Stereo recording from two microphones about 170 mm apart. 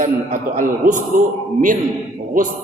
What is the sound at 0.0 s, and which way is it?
Speech, 50° right (ahead or behind).